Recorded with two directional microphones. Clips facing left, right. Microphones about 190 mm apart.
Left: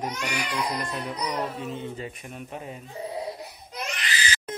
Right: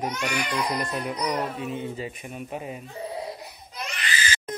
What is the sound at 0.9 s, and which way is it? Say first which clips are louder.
Speech: right 3 dB; 10° right (ahead or behind).